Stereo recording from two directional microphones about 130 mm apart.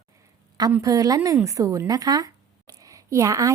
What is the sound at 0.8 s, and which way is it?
Speech, 25° right (ahead or behind).